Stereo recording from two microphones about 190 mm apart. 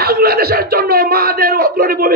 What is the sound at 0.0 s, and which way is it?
Speech, 55° right (ahead or behind).